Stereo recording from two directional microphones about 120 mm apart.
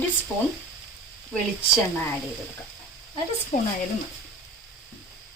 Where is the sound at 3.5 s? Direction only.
90° left.